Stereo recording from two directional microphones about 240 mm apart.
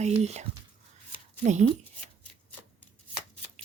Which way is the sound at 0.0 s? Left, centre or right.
Right.